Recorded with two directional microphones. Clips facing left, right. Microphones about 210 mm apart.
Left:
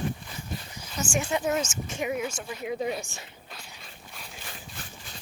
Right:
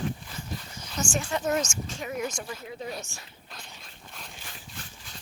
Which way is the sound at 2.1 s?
5° left (ahead or behind).